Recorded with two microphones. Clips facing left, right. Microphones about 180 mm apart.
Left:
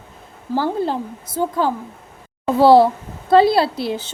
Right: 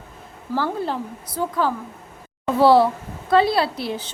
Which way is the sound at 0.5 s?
30° left (ahead or behind).